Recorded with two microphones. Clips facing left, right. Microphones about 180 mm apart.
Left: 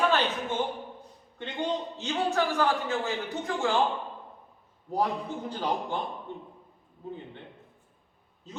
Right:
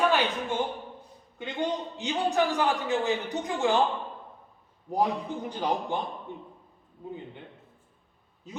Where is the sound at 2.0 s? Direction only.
15° right (ahead or behind).